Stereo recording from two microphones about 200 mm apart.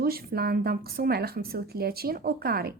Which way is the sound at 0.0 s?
50° right (ahead or behind).